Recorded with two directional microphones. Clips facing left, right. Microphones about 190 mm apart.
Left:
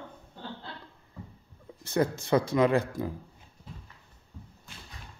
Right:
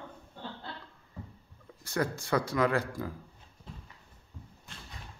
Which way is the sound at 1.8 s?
20° left (ahead or behind).